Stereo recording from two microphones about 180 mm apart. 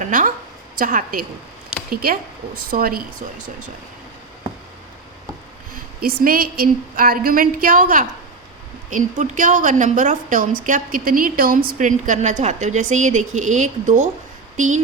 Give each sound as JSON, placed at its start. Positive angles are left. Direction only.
{"t": 0.0, "sound": "a woman's voice", "side_deg": -45}
{"t": 5.7, "sound": "a sound", "side_deg": -55}
{"t": 6.2, "sound": "a woman's voice", "side_deg": -55}